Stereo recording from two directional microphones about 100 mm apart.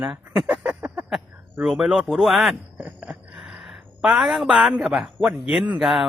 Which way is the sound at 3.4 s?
Centre (ahead or behind).